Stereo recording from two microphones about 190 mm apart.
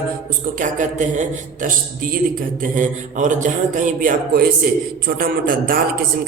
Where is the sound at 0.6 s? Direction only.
40° right (ahead or behind).